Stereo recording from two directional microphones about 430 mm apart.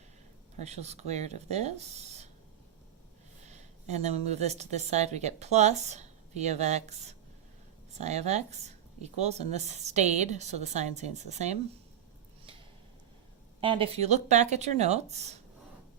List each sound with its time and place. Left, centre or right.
0.6 s speech: centre
3.4 s a sound: centre
4.3 s speech: centre
13.6 s speech: centre